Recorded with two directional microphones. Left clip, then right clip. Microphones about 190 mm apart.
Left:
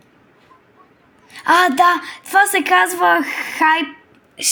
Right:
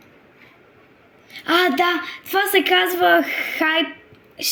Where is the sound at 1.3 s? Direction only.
40° left (ahead or behind); by 3.8 s 20° left (ahead or behind).